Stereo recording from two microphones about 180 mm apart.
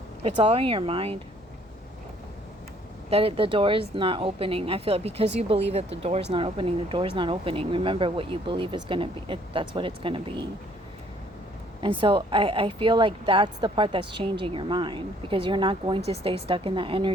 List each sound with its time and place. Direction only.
0.2 s speech: 35° right (ahead or behind)
3.1 s speech: 30° right (ahead or behind)
11.9 s speech: 30° right (ahead or behind)